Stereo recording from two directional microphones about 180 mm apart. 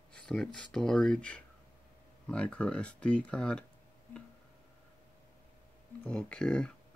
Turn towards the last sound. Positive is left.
turn(degrees=5)  # may be behind; listen again after turning